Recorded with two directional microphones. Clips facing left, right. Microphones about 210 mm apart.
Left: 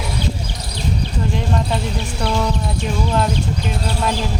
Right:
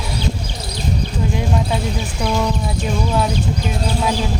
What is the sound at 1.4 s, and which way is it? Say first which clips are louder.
Speech: right 1 dB; 5° right (ahead or behind).